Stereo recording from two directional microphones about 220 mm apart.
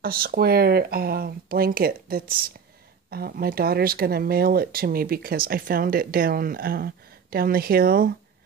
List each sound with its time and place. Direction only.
0.0 s speech: 40° right (ahead or behind)